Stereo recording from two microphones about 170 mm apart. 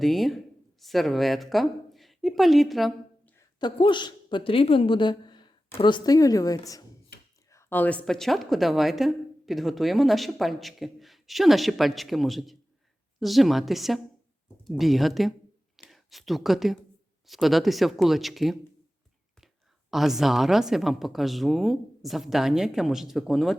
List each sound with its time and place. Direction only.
0.0 s speech: centre (ahead or behind)
3.6 s a woman's voice: 25° left (ahead or behind); by 15.3 s centre (ahead or behind)
15.7 s whispering: centre (ahead or behind)
17.2 s a woman's voice: centre (ahead or behind)
19.9 s a woman's voice: centre (ahead or behind)